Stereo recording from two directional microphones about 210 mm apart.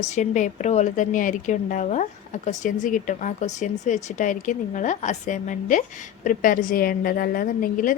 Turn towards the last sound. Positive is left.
turn(degrees=40)  # may be behind; listen again after turning